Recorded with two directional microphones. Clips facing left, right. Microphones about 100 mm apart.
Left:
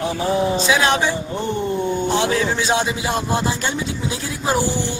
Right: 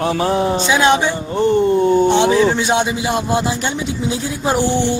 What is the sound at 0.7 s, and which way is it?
Speech, 25° right (ahead or behind).